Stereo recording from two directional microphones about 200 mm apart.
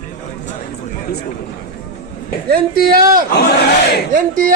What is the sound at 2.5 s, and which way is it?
Speech, 50° right (ahead or behind).